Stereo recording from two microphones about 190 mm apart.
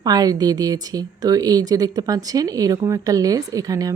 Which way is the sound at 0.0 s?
20° right (ahead or behind).